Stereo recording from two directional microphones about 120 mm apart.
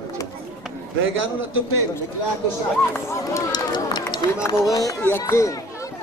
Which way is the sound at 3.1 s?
25° left (ahead or behind).